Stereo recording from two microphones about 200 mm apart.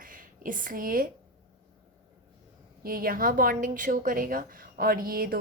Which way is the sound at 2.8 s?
45° right (ahead or behind).